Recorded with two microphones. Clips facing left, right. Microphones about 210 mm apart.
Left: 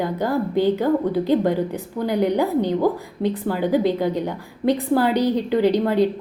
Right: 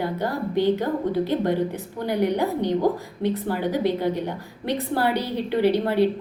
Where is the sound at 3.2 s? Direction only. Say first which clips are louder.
Left 3 dB; 15° left (ahead or behind).